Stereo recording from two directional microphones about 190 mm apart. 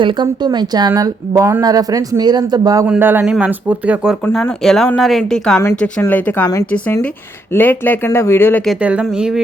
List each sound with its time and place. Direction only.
0.0 s speech: 25° right (ahead or behind)
2.8 s speech: 10° right (ahead or behind)
4.2 s speech: 10° left (ahead or behind)